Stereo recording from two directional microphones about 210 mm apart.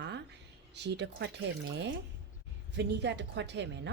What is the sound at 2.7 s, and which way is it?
Speech, 55° right (ahead or behind).